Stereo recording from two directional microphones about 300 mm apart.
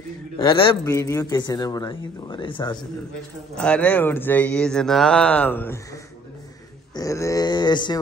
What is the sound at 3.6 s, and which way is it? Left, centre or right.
Speech, centre.